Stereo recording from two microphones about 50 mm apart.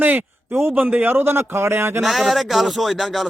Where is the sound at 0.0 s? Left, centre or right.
Right.